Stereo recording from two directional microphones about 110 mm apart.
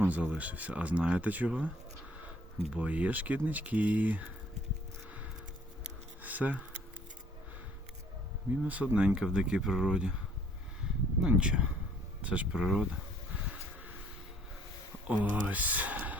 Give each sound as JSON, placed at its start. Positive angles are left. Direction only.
{"t": 0.0, "sound": "speech", "side_deg": -15}
{"t": 2.7, "sound": "speech", "side_deg": -15}
{"t": 6.2, "sound": "a sound", "side_deg": -15}
{"t": 8.6, "sound": "speech", "side_deg": -10}
{"t": 11.2, "sound": "speech", "side_deg": -10}
{"t": 15.0, "sound": "speech", "side_deg": -15}